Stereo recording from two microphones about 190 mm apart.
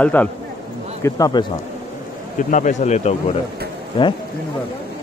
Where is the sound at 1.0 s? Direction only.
20° left (ahead or behind).